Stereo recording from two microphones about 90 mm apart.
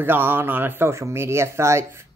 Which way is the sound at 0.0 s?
25° right (ahead or behind).